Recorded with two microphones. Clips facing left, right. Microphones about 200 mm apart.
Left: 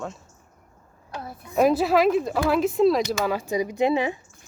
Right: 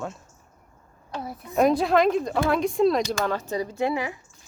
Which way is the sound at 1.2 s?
Centre (ahead or behind).